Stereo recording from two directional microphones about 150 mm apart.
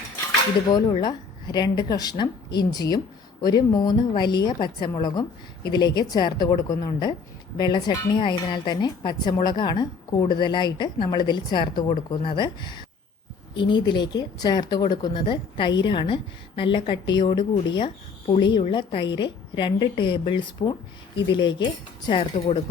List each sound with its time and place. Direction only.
0.7 s speech: 30° left (ahead or behind); by 22.6 s 45° left (ahead or behind)